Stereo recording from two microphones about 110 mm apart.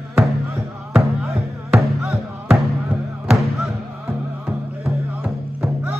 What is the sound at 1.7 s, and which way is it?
Music, 10° right (ahead or behind).